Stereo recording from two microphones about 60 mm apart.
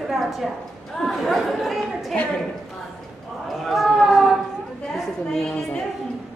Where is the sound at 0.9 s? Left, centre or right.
Centre.